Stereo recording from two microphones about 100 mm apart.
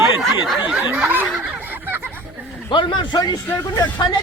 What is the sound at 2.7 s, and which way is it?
Speech, 50° left (ahead or behind).